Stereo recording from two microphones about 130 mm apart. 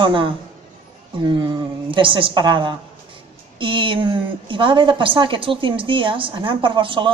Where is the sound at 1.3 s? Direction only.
35° right (ahead or behind).